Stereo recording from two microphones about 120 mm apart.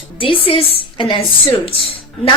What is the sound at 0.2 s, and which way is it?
A woman's voice, 45° left (ahead or behind).